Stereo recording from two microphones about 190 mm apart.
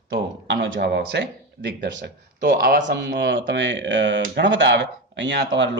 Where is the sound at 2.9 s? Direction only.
65° right (ahead or behind).